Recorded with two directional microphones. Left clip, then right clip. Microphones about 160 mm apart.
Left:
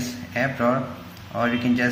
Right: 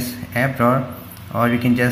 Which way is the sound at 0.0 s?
40° right (ahead or behind).